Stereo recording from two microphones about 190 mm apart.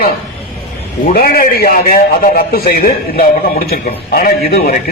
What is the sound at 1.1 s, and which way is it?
A man's voice, 50° left (ahead or behind).